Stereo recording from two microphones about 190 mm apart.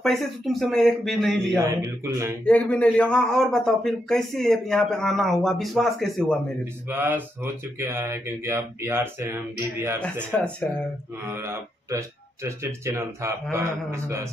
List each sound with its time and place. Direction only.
0.0 s a man's voice: centre (ahead or behind)
1.6 s speech: 15° right (ahead or behind)
2.4 s a man's voice: 5° left (ahead or behind)
6.6 s speech: 10° right (ahead or behind)
11.2 s speech: 15° right (ahead or behind)